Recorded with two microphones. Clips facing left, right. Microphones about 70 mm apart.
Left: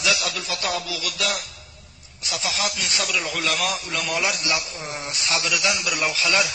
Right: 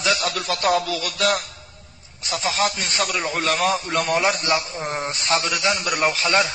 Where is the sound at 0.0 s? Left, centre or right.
Right.